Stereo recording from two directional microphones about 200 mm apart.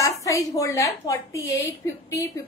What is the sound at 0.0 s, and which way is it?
A woman's voice, 15° left (ahead or behind).